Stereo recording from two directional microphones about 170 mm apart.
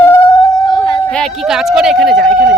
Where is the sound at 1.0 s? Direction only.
5° left (ahead or behind).